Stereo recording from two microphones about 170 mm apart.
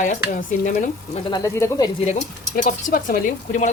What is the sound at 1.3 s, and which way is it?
Speech, 20° left (ahead or behind).